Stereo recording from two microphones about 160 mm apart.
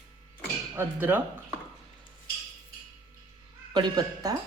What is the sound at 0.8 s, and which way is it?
Speech, 10° right (ahead or behind).